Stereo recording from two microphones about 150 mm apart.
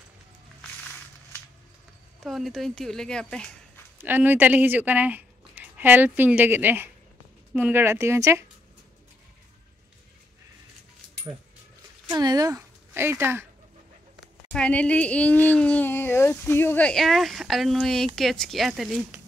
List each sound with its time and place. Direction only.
2.1 s speech: centre (ahead or behind)
4.0 s speech: 10° right (ahead or behind)
12.1 s speech: 25° right (ahead or behind)
14.2 s speech: 5° left (ahead or behind)